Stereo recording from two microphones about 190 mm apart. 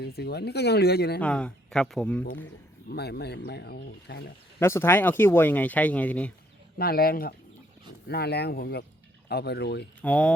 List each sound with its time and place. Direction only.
0.0 s speech: 60° left (ahead or behind)
1.2 s speech: 5° left (ahead or behind)
2.9 s speech: 60° left (ahead or behind)
4.6 s speech: 15° left (ahead or behind)
6.7 s speech: 55° left (ahead or behind)
10.0 s speech: 5° left (ahead or behind)